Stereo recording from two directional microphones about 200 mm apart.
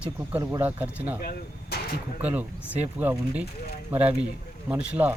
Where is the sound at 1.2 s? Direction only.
50° left (ahead or behind).